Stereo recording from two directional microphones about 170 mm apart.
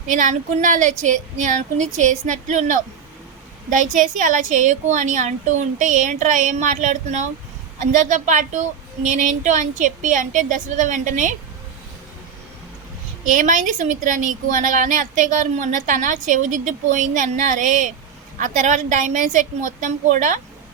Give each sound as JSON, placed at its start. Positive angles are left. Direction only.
{"t": 0.1, "sound": "speech", "side_deg": -50}
{"t": 13.3, "sound": "speech", "side_deg": -50}